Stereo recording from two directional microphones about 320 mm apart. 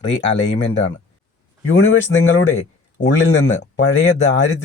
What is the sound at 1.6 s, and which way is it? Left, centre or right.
Speech, left.